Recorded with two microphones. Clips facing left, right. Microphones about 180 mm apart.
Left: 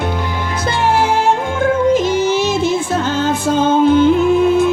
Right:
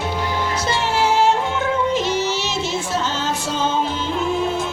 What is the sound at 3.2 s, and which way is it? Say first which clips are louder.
Music: left 8 dB; 55° left (ahead or behind).